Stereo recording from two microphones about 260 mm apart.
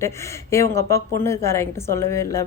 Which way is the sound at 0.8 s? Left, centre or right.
Centre.